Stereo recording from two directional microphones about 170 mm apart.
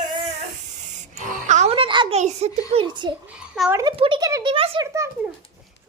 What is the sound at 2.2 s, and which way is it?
Giggle, 40° right (ahead or behind).